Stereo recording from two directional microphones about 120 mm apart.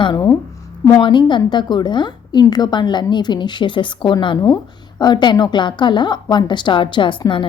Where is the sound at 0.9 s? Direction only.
40° left (ahead or behind).